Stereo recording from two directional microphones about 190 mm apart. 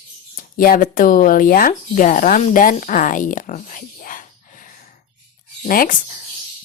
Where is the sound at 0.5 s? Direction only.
45° left (ahead or behind).